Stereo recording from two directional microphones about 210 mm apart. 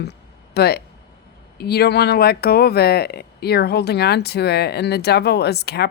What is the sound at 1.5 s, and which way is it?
Speech, 50° left (ahead or behind).